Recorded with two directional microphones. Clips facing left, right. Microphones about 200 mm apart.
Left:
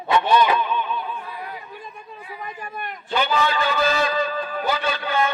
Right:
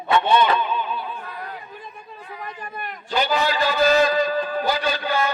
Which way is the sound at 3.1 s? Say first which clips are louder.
Even; 40° right (ahead or behind).